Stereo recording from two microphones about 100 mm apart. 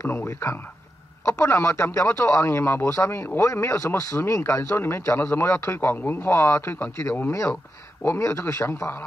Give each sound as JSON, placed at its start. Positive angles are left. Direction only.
{"t": 0.0, "sound": "speech", "side_deg": 25}